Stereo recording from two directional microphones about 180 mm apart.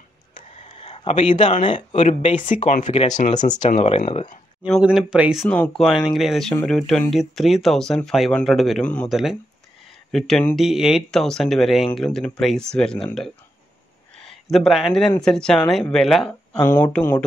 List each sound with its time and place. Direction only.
0.7 s a sound: 35° left (ahead or behind)
1.4 s speech: 30° left (ahead or behind)
3.3 s speech: 25° left (ahead or behind)
3.6 s speech: 40° left (ahead or behind)
4.8 s speech: 5° right (ahead or behind)
14.1 s speech: centre (ahead or behind)
16.5 s speech: 15° left (ahead or behind)